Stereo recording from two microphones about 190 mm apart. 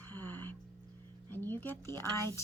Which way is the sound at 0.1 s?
10° left (ahead or behind).